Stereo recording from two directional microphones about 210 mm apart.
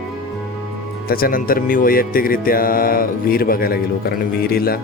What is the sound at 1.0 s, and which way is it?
Speech, 45° left (ahead or behind).